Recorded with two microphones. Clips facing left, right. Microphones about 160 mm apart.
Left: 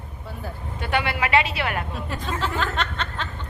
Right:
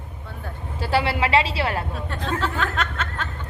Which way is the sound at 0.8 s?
30° right (ahead or behind).